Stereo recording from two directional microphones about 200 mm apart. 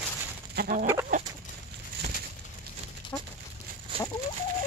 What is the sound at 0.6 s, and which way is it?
Chicken, 40° right (ahead or behind).